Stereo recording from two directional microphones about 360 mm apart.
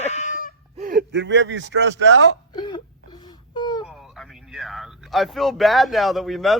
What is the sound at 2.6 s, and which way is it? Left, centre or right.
Whimper, centre.